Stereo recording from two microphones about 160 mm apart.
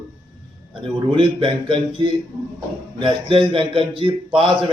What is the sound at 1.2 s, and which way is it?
Speech, 30° right (ahead or behind).